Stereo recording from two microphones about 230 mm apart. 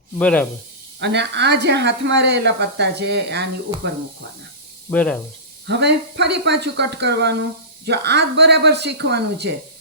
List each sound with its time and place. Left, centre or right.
0.2 s speech: centre
0.9 s speech: right
4.9 s speech: centre
5.6 s speech: right